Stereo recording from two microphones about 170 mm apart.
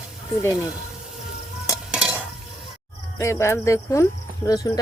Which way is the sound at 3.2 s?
15° left (ahead or behind).